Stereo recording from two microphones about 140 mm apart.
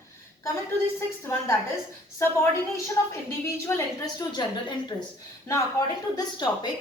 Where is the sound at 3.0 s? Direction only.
20° left (ahead or behind).